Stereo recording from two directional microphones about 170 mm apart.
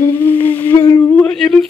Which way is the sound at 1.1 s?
5° left (ahead or behind).